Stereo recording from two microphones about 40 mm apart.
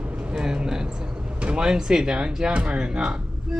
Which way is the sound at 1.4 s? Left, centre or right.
Right.